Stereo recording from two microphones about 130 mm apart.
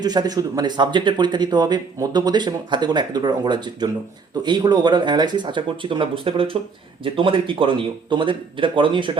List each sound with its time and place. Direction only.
0.0 s speech: 30° right (ahead or behind)